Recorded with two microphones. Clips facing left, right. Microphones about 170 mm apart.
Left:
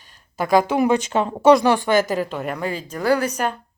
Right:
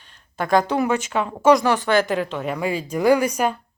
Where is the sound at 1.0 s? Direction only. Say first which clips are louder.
Left 1 dB; 30° left (ahead or behind).